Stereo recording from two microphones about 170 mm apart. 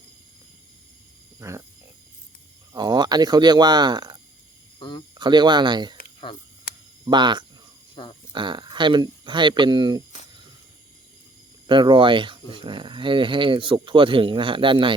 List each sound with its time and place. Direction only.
1.4 s a sound: 15° right (ahead or behind)
2.7 s speech: 25° right (ahead or behind)
4.8 s speech: 25° left (ahead or behind)
5.1 s speech: 25° right (ahead or behind)
7.0 s speech: 25° right (ahead or behind)
8.0 s speech: 30° left (ahead or behind)
8.3 s speech: 25° right (ahead or behind)
11.6 s speech: 30° right (ahead or behind)